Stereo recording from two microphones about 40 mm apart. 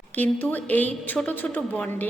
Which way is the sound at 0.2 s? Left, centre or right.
Left.